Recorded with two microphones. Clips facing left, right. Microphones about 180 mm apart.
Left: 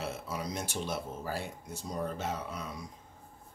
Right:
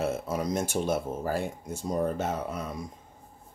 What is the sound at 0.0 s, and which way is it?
Speech, 50° right (ahead or behind).